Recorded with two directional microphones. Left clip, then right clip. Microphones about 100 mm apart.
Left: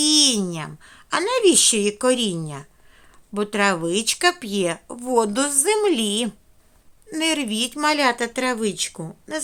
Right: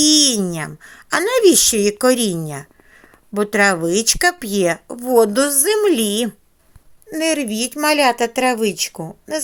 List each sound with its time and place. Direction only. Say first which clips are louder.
0.0 s a sound: right 4 dB; 45° right (ahead or behind)
1.2 s a woman's voice: right 4 dB; 40° right (ahead or behind)
7.1 s speech: right 3 dB; 25° right (ahead or behind)